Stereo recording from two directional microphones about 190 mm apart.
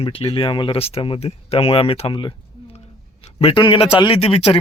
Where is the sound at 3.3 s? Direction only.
30° left (ahead or behind).